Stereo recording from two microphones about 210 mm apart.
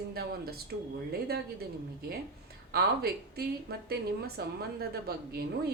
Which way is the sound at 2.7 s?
45° right (ahead or behind).